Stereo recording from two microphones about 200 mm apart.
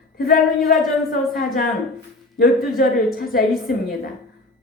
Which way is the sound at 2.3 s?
50° left (ahead or behind).